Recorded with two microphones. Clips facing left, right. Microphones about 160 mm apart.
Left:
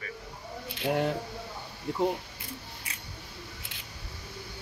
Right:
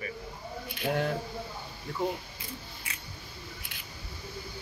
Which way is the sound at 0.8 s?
20° left (ahead or behind).